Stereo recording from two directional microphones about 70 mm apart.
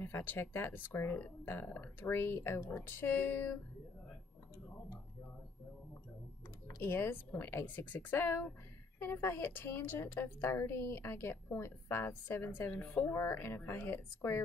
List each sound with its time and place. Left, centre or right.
0.0 s a woman's voice: left
6.8 s a woman's voice: left
7.6 s a woman's voice: left